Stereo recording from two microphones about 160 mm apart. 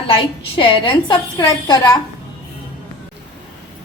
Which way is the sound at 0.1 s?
30° left (ahead or behind).